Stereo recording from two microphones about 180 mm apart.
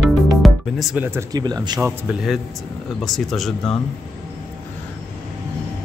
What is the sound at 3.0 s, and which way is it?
Speech, centre (ahead or behind).